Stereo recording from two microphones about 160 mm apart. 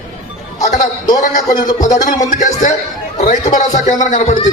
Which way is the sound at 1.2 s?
55° left (ahead or behind).